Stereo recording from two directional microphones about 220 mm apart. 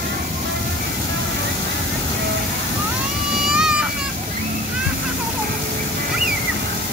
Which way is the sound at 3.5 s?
5° right (ahead or behind).